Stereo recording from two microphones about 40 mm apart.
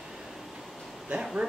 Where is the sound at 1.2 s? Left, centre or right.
Centre.